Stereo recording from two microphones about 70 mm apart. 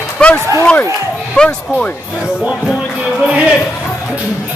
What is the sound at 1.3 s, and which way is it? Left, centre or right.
Speech, centre.